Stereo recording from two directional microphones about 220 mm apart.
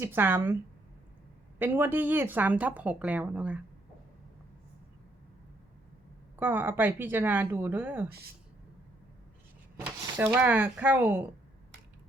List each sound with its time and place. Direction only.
0.0 s a woman's voice: 10° right (ahead or behind)
1.5 s a woman's voice: 10° right (ahead or behind)
6.3 s a woman's voice: 10° right (ahead or behind)
9.8 s a woman's voice: 10° right (ahead or behind)